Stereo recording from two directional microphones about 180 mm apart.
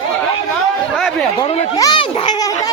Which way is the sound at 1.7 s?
20° left (ahead or behind).